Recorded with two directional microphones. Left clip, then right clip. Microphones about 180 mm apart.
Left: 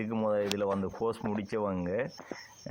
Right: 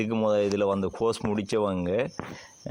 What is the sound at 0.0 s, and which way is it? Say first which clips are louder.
Speech: right 6 dB; 35° right (ahead or behind).